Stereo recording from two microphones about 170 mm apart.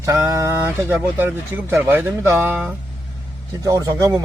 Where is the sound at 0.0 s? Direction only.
20° right (ahead or behind).